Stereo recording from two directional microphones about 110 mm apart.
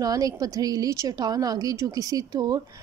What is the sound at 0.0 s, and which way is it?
A woman's voice, 35° right (ahead or behind).